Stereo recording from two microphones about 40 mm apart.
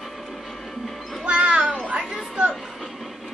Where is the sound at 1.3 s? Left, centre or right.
Right.